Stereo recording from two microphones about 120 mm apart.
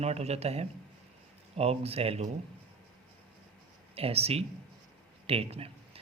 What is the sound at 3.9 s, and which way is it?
Speech, 55° right (ahead or behind).